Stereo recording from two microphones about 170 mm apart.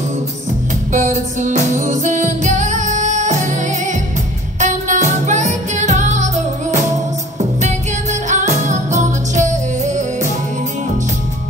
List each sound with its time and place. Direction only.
0.9 s music: 45° right (ahead or behind)